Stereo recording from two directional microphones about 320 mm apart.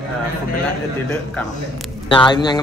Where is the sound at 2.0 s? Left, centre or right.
Centre.